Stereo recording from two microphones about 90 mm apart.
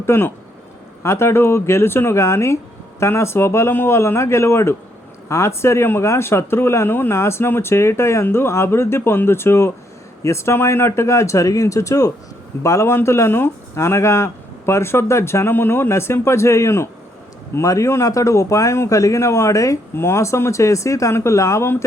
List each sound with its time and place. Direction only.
0.0 s a man's voice: 25° left (ahead or behind)